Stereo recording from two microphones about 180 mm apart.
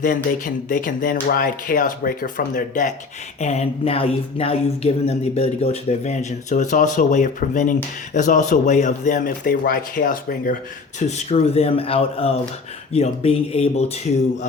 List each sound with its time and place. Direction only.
0.0 s speech: 50° left (ahead or behind)
3.4 s speech: 35° left (ahead or behind)
11.0 s speech: 35° left (ahead or behind)